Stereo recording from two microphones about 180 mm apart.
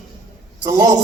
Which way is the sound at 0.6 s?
15° right (ahead or behind).